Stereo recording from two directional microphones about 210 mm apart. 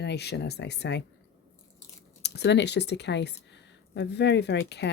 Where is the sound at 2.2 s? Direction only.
55° left (ahead or behind).